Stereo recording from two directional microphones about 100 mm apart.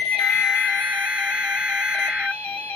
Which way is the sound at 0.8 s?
15° right (ahead or behind).